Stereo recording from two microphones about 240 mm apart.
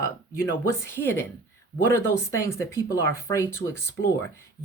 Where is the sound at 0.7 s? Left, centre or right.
Centre.